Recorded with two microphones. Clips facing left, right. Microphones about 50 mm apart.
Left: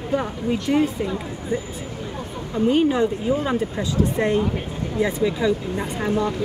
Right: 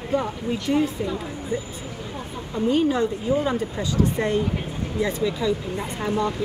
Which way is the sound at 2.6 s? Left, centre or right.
Left.